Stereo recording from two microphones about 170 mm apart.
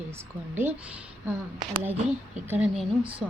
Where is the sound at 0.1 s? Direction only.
10° right (ahead or behind).